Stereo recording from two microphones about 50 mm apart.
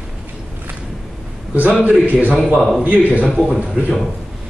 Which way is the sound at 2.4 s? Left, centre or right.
Centre.